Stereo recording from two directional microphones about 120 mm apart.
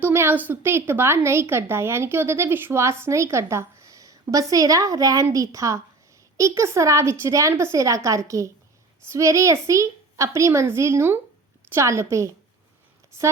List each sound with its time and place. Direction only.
0.0 s a woman's voice: 20° right (ahead or behind)